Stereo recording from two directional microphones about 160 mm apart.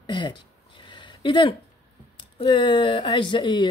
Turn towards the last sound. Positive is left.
turn(degrees=30)  # may be behind; listen again after turning